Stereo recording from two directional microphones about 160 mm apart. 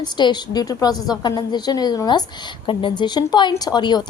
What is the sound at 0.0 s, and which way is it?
A woman's voice, 25° left (ahead or behind).